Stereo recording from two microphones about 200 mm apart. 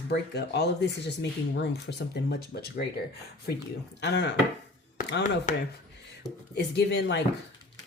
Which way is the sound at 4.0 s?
60° left (ahead or behind).